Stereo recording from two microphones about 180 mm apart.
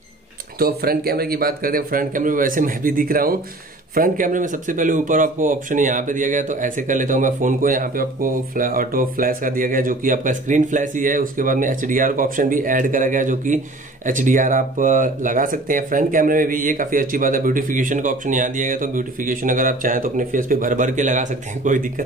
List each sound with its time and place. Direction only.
0.6 s speech: 55° right (ahead or behind)